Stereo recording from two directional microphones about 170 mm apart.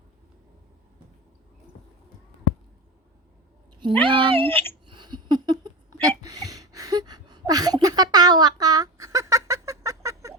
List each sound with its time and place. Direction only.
4.0 s speech: 30° right (ahead or behind)
4.4 s speech: 10° left (ahead or behind)
4.9 s a sound: 25° right (ahead or behind)